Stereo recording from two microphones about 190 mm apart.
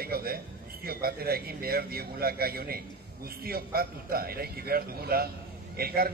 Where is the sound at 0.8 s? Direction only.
55° right (ahead or behind).